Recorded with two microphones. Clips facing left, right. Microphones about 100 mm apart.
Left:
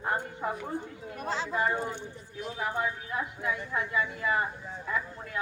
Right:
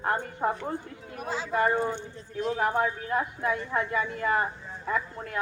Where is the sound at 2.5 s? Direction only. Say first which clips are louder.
Right 4 dB; 50° right (ahead or behind).